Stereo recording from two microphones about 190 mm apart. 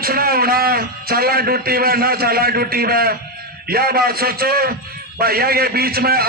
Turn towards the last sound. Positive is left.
turn(degrees=-55)  # may be behind; listen again after turning